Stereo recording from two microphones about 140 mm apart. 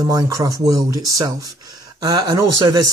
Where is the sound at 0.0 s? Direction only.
25° right (ahead or behind).